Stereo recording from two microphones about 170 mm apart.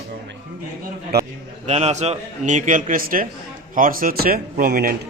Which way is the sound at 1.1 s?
70° right (ahead or behind).